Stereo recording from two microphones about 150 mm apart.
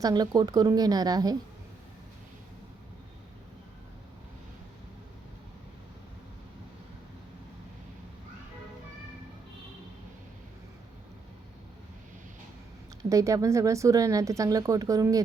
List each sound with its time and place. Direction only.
0.0 s speech: 25° right (ahead or behind)
13.0 s speech: 20° right (ahead or behind)